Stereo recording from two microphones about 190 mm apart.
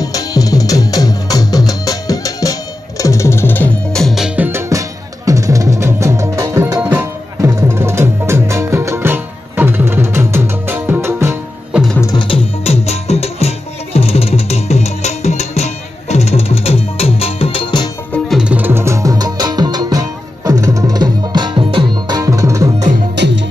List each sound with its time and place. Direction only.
0.0 s music: 20° left (ahead or behind); by 4.5 s centre (ahead or behind)
4.5 s music: 15° right (ahead or behind)
12.0 s music: 20° left (ahead or behind)
18.1 s music: centre (ahead or behind)
23.1 s music: 65° right (ahead or behind)